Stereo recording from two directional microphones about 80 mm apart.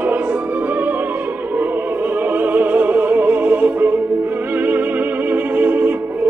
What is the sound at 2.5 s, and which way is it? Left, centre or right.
Music, right.